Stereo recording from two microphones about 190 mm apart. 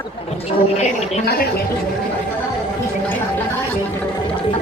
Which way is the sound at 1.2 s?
55° left (ahead or behind).